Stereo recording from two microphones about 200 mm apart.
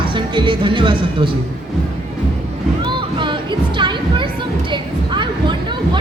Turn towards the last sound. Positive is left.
turn(degrees=-25)  # may be behind; listen again after turning